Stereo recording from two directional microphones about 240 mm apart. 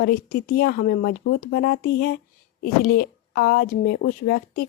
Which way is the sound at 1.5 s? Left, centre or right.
Left.